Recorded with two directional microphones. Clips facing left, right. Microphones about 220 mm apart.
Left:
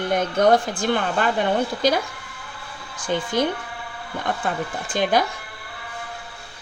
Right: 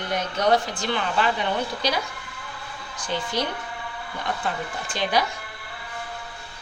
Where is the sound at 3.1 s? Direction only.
50° left (ahead or behind).